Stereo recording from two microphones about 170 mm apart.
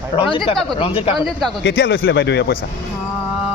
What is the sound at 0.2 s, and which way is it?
Speech, 30° left (ahead or behind).